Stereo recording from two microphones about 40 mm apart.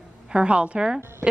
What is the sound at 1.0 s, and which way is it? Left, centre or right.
Speech, right.